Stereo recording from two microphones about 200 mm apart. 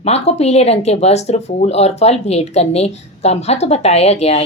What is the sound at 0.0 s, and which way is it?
Speech, 30° left (ahead or behind).